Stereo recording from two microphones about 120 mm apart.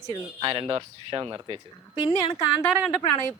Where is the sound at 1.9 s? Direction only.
50° left (ahead or behind).